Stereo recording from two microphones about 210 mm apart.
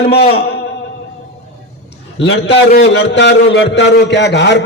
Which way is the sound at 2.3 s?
60° left (ahead or behind).